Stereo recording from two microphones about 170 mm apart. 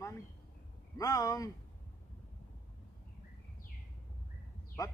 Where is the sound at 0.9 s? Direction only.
20° left (ahead or behind).